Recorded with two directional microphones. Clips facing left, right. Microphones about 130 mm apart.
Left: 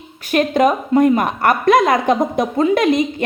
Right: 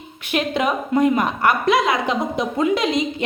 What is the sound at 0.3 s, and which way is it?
A woman's voice, 45° left (ahead or behind).